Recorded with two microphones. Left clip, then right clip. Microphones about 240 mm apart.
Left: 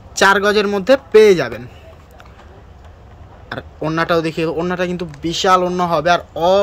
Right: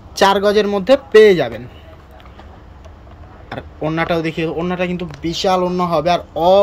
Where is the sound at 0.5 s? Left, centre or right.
Centre.